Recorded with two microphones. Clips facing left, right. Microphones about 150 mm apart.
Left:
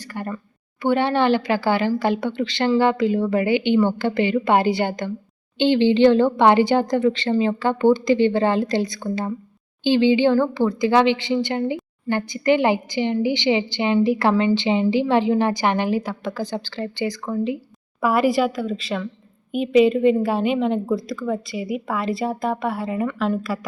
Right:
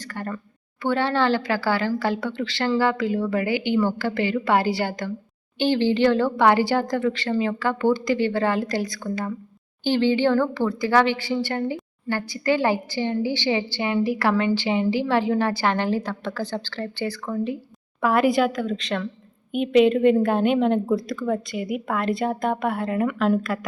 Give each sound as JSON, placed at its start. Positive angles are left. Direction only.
{"t": 0.1, "sound": "a woman's voice", "side_deg": 15}
{"t": 18.0, "sound": "a woman's voice", "side_deg": 5}